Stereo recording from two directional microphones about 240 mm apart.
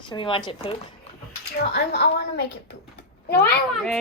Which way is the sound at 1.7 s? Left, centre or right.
Left.